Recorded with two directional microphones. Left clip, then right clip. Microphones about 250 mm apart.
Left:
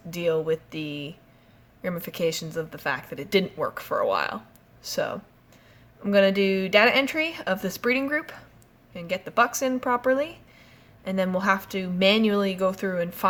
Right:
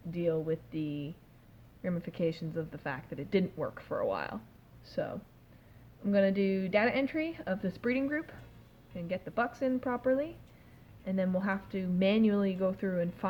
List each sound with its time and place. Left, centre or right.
0.1 s a woman's voice: centre